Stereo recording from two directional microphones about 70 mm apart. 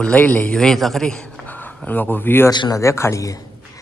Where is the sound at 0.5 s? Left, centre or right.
Centre.